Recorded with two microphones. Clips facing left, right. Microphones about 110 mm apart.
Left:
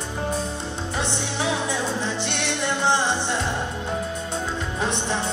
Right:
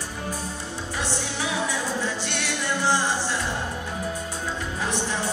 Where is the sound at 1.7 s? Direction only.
25° left (ahead or behind).